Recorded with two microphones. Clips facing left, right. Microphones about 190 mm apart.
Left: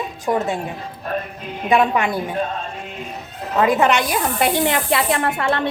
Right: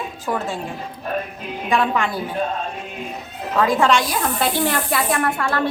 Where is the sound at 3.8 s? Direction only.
20° left (ahead or behind).